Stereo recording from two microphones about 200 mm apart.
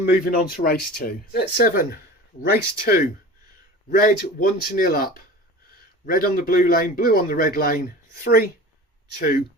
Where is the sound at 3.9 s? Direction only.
45° left (ahead or behind).